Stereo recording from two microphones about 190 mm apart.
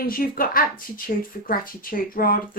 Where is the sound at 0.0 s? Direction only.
50° left (ahead or behind).